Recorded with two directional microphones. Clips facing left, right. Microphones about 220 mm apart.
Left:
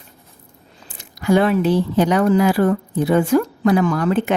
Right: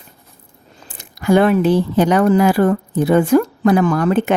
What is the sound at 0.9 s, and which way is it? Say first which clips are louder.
Speech: right 2 dB; 50° right (ahead or behind).